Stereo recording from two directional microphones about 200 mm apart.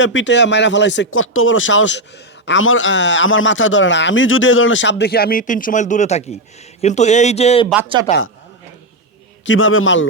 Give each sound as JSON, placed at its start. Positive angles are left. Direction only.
{"t": 0.0, "sound": "a man's voice", "side_deg": 70}
{"t": 9.5, "sound": "a man's voice", "side_deg": 80}